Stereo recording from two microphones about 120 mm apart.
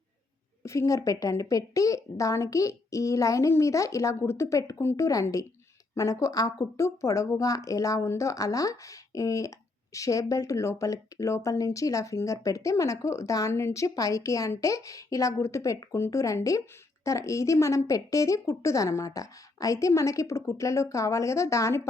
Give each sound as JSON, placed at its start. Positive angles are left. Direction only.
{"t": 0.6, "sound": "speech", "side_deg": 25}